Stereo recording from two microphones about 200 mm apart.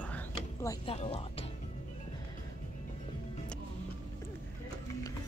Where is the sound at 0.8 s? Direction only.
30° left (ahead or behind).